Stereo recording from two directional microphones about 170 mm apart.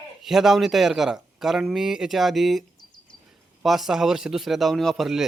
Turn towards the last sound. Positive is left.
turn(degrees=0)  # may be behind; listen again after turning